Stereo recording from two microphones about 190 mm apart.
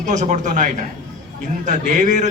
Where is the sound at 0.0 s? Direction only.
40° right (ahead or behind).